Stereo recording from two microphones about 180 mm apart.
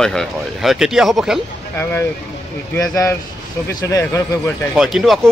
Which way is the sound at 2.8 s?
20° left (ahead or behind).